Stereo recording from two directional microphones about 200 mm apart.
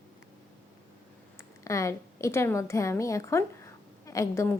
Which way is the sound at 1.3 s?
15° left (ahead or behind).